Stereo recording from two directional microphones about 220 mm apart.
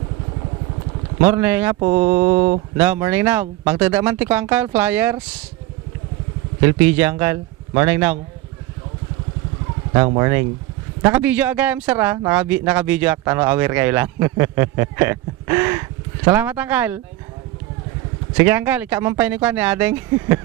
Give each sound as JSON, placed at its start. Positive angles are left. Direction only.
{"t": 1.2, "sound": "speech", "side_deg": -10}
{"t": 1.8, "sound": "speech", "side_deg": -20}
{"t": 2.0, "sound": "speech", "side_deg": -10}
{"t": 6.6, "sound": "speech", "side_deg": -10}
{"t": 9.9, "sound": "speech", "side_deg": -15}
{"t": 18.4, "sound": "speech", "side_deg": -10}